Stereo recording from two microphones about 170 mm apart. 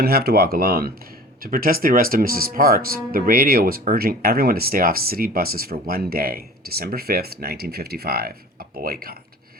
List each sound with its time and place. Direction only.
0.0 s speech: 65° right (ahead or behind)